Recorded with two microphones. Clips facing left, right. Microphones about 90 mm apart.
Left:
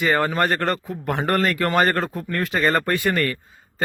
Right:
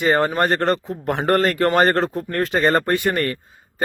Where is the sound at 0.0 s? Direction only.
30° right (ahead or behind).